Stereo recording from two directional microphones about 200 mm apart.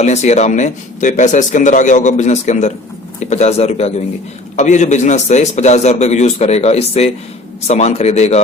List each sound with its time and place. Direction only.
0.0 s speech: 35° left (ahead or behind)